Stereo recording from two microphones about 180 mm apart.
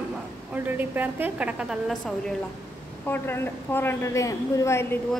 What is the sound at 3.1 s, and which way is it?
A woman's voice, 10° left (ahead or behind).